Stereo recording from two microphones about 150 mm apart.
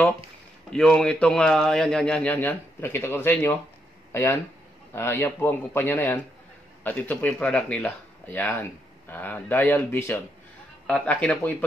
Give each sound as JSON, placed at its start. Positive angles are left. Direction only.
{"t": 0.7, "sound": "speech", "side_deg": 5}